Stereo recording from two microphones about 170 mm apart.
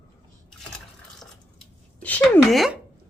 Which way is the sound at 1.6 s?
10° left (ahead or behind).